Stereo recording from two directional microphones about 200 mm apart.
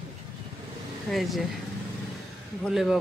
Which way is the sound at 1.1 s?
5° left (ahead or behind).